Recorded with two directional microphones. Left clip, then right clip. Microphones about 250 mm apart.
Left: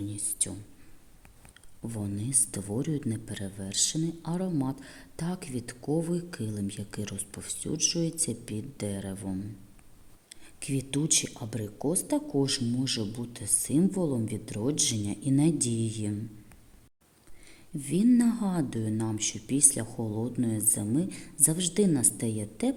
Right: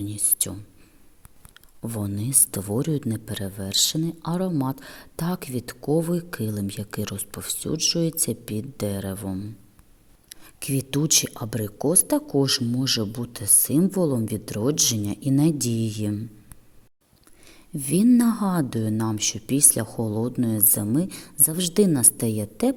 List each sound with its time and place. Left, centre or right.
0.1 s speech: right
1.5 s speech: right
17.4 s speech: right